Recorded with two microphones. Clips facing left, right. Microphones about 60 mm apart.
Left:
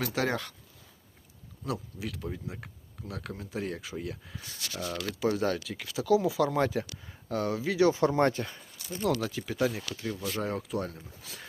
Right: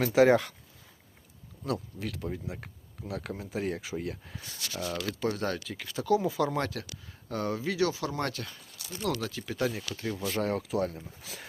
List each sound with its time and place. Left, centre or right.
0.0 s speech: centre
1.6 s speech: centre
6.7 s speech: centre
7.3 s speech: centre
7.8 s speech: left
9.0 s speech: centre
10.1 s speech: centre